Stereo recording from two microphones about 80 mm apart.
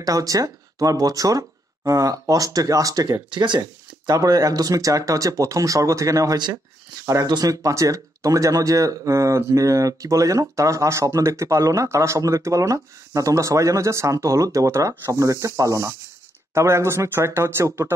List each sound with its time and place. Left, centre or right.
0.0 s speech: right
3.3 s speech: right
4.2 s speech: right